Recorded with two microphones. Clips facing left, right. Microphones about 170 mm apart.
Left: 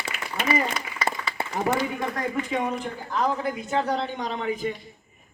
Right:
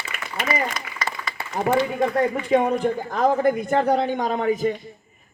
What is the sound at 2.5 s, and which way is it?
A man's voice, 60° right (ahead or behind).